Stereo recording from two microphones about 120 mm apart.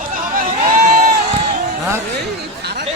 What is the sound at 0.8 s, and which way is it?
Crowd, 85° right.